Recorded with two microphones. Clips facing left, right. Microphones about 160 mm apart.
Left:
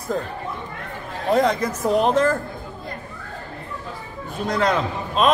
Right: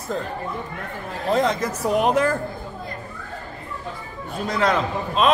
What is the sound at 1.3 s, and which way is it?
Speech, centre (ahead or behind).